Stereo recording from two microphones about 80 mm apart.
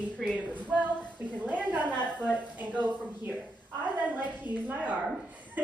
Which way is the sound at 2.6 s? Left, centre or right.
Right.